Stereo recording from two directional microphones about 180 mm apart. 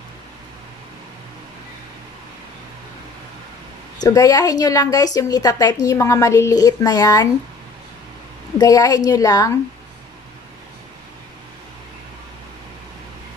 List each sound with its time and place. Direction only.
4.0 s a woman's voice: 20° left (ahead or behind)
8.5 s a woman's voice: 20° left (ahead or behind)